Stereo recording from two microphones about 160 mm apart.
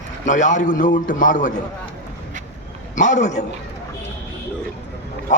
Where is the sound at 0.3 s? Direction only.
50° left (ahead or behind).